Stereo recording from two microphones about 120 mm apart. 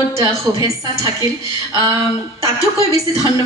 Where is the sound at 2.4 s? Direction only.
25° right (ahead or behind).